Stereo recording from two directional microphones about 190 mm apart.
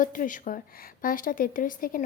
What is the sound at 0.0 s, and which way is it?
A woman's voice, 45° left (ahead or behind).